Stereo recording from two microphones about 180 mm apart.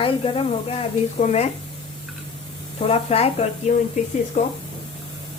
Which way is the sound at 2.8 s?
35° left (ahead or behind).